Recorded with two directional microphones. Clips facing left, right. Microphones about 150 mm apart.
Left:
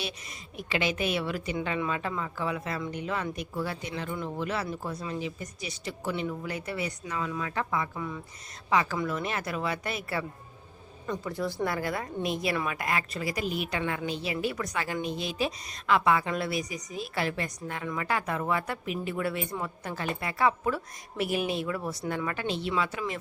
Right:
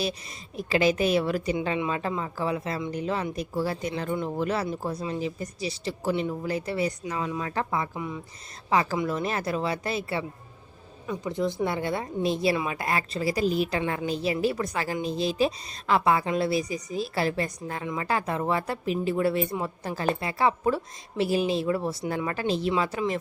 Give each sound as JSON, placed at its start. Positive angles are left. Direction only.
{"t": 0.0, "sound": "a woman's voice", "side_deg": -35}
{"t": 7.9, "sound": "speech", "side_deg": -20}
{"t": 8.7, "sound": "a woman's voice", "side_deg": -35}